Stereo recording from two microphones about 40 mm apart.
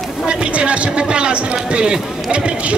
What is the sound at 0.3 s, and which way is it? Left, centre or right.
Speech, right.